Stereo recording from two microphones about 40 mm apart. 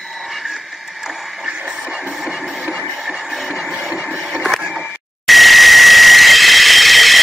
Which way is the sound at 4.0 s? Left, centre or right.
Centre.